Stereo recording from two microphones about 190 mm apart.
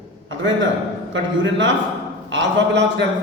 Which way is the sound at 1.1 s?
75° right (ahead or behind).